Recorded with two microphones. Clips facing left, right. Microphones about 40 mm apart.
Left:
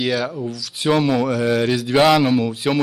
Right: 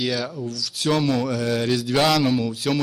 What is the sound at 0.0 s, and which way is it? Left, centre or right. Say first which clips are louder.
A man's voice: left 4 dB; centre.